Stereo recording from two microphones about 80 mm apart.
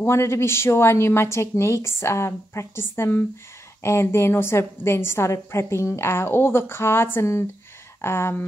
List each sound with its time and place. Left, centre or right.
0.0 s a woman's voice: left